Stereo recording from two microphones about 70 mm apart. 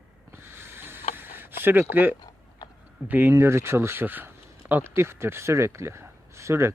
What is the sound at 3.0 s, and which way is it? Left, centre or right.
Speech, right.